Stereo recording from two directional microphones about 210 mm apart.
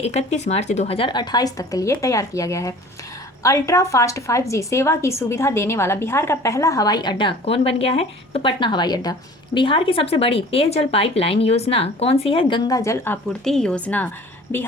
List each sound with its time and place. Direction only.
0.0 s speech: 30° left (ahead or behind); by 13.1 s 15° left (ahead or behind)
13.4 s a woman's voice: centre (ahead or behind)